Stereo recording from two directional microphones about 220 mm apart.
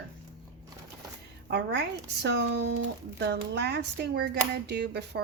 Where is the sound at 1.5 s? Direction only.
50° right (ahead or behind).